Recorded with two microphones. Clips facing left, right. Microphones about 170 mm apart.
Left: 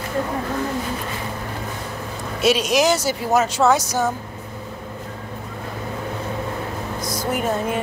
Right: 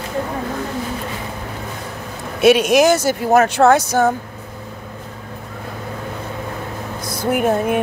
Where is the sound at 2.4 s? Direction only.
55° right (ahead or behind).